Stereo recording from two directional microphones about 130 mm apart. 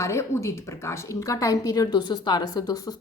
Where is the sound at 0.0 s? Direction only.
20° left (ahead or behind).